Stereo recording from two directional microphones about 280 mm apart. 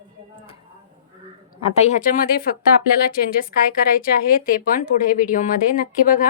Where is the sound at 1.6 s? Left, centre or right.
Left.